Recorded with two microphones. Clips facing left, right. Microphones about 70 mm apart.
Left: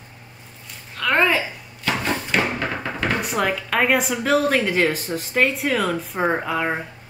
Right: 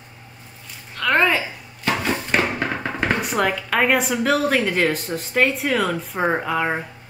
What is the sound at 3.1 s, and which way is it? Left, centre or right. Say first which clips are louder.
Speech: right 1 dB; centre.